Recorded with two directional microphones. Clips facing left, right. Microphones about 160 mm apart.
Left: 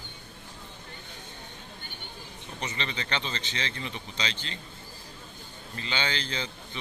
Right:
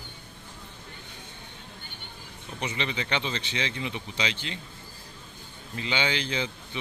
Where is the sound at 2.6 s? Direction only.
10° right (ahead or behind).